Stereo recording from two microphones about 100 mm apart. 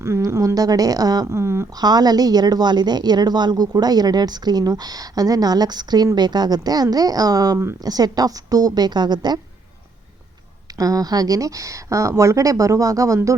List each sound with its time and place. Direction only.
0.0 s a woman's voice: 30° right (ahead or behind)
1.8 s a woman's voice: 40° right (ahead or behind)
10.8 s a woman's voice: 35° right (ahead or behind)